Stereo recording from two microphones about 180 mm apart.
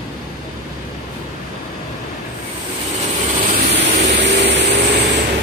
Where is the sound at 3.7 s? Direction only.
70° right (ahead or behind).